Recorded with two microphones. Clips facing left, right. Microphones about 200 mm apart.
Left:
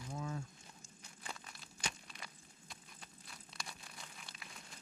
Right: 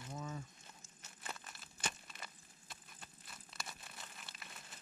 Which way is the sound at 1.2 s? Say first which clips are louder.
Even; 5° right (ahead or behind).